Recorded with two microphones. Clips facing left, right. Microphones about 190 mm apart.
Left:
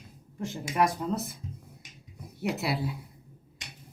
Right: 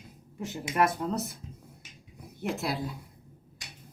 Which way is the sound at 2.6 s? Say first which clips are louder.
Left 1 dB; 5° left (ahead or behind).